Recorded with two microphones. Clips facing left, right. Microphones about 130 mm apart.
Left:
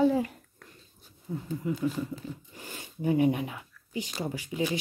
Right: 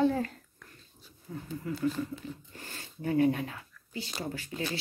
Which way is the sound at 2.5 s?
15° left (ahead or behind).